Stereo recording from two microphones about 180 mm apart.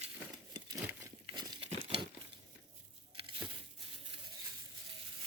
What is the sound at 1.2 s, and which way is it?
Crumpling, 25° right (ahead or behind).